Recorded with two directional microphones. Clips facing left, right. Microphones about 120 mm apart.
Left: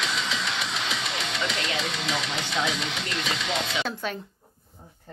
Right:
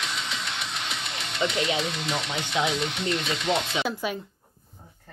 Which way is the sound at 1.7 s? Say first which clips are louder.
Right 1 dB; 90° left.